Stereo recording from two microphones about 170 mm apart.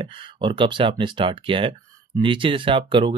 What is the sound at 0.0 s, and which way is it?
Speech, 30° right (ahead or behind).